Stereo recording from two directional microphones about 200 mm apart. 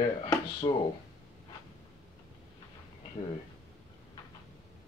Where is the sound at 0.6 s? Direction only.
25° left (ahead or behind).